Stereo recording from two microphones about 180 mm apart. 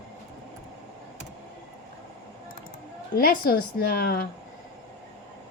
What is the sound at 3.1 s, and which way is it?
A woman's voice, 55° left (ahead or behind).